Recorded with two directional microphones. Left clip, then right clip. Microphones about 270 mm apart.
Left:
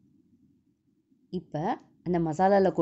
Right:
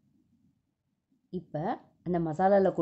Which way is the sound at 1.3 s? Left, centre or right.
Centre.